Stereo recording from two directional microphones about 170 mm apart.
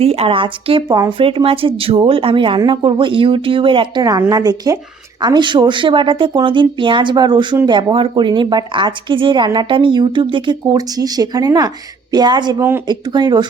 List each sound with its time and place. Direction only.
0.0 s speech: 35° right (ahead or behind)